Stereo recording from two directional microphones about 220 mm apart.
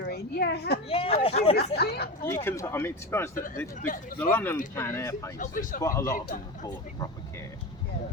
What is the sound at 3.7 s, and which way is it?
Speech, 40° left (ahead or behind).